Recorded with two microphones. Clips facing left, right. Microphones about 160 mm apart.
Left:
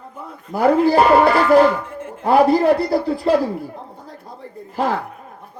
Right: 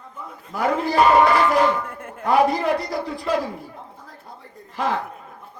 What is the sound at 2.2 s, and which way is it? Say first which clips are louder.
A man's voice: left 5 dB; 35° left (ahead or behind).